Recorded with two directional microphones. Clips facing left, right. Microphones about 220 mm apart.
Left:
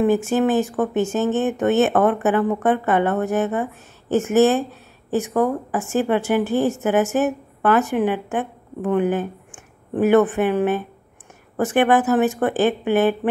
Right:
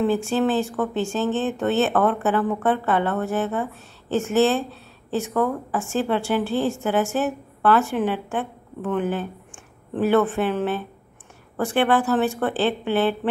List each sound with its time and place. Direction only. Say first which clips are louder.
0.0 s a woman's voice: left 3 dB; 15° left (ahead or behind)